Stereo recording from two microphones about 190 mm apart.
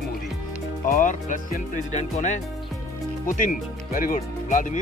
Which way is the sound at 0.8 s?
40° left (ahead or behind).